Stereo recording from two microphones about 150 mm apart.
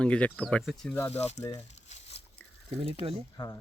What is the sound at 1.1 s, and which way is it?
Speech, 45° left (ahead or behind).